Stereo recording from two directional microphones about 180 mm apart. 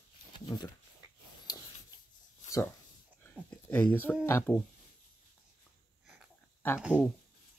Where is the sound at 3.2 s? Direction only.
10° left (ahead or behind).